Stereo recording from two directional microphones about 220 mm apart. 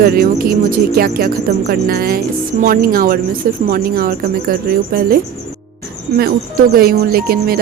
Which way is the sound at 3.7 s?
40° right (ahead or behind).